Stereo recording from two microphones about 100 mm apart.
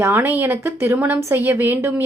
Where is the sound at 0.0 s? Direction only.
20° right (ahead or behind).